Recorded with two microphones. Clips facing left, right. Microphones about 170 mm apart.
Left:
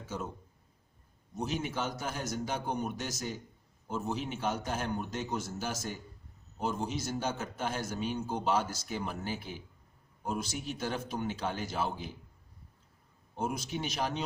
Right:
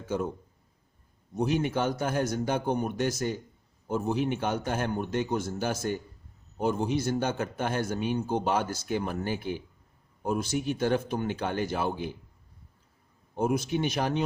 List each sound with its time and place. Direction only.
1.4 s a man's voice: 60° right (ahead or behind)
13.3 s a man's voice: 55° right (ahead or behind)